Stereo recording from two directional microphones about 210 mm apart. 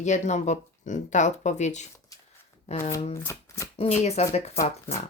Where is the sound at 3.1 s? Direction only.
15° left (ahead or behind).